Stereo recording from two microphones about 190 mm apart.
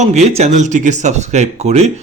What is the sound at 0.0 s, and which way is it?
Speech, 35° right (ahead or behind).